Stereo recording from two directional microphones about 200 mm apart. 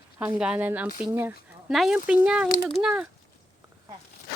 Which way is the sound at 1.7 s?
Centre (ahead or behind).